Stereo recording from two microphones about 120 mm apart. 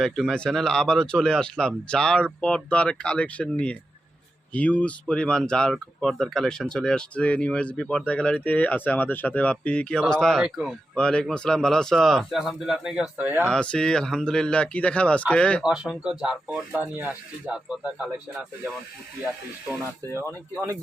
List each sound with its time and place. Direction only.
0.0 s speech: centre (ahead or behind); by 13.5 s 15° right (ahead or behind)
13.5 s speech: 5° left (ahead or behind)
15.6 s speech: 5° right (ahead or behind)
20.1 s speech: 25° right (ahead or behind)